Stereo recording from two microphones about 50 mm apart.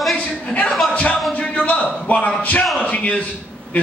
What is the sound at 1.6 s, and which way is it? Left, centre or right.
A man's voice, left.